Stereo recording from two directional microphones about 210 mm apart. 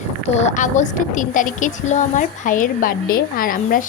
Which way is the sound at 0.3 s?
35° left (ahead or behind).